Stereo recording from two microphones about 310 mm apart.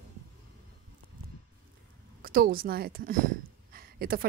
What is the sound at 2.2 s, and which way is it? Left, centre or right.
A woman's voice, right.